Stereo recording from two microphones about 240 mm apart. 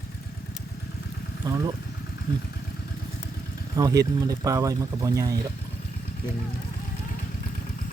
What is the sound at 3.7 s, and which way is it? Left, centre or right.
Speech, centre.